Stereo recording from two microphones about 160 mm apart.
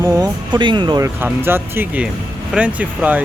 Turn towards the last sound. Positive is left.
turn(degrees=-10)  # may be behind; listen again after turning